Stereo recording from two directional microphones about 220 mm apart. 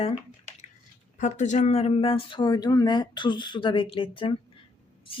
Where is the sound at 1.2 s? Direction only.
35° left (ahead or behind).